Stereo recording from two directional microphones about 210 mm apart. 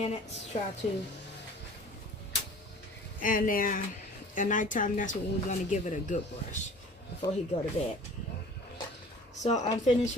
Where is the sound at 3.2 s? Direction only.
40° left (ahead or behind).